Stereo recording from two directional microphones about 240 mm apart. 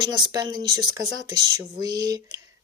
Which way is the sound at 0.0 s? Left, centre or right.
Centre.